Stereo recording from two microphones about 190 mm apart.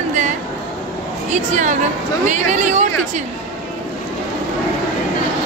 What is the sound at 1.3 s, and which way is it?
Speech, 40° right (ahead or behind).